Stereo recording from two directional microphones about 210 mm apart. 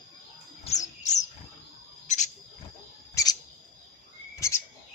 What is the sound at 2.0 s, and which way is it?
Cricket, 35° left (ahead or behind).